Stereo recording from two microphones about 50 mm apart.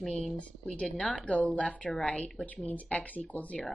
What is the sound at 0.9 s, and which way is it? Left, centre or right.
Speech, left.